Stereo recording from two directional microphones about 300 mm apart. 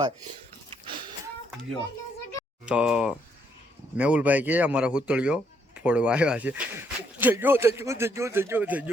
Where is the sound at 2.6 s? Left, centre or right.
Centre.